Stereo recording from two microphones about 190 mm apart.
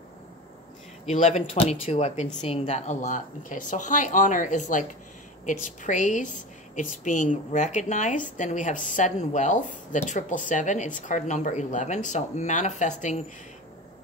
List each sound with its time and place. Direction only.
1.0 s a woman's voice: 35° left (ahead or behind)